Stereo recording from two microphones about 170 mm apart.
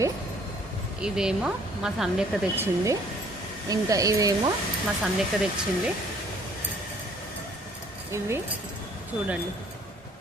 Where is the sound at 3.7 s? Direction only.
20° right (ahead or behind).